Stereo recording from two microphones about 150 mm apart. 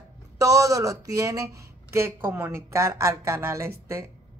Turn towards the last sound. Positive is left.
turn(degrees=-20)  # may be behind; listen again after turning